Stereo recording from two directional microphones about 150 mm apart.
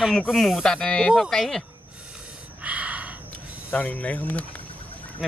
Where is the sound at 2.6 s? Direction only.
10° right (ahead or behind).